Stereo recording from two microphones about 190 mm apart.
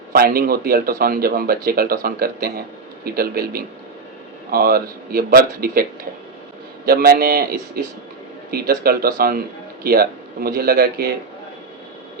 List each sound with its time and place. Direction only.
0.1 s a man's voice: 50° right (ahead or behind)
6.8 s a man's voice: 55° right (ahead or behind)